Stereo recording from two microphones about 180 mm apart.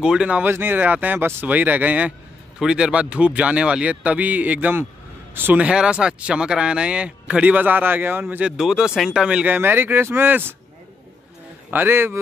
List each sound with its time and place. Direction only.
0.0 s speech: 5° right (ahead or behind)
11.7 s speech: 10° right (ahead or behind)